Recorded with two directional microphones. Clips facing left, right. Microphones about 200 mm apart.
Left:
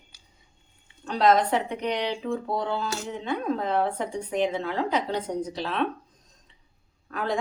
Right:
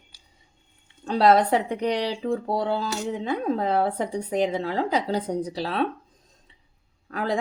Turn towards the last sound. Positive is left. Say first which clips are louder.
# right 2 dB
turn(degrees=-35)  # may be behind; listen again after turning